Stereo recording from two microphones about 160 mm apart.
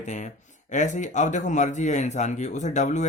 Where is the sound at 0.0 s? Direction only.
50° left (ahead or behind).